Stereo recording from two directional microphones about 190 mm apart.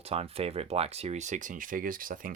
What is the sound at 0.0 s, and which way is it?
Speech, 30° right (ahead or behind).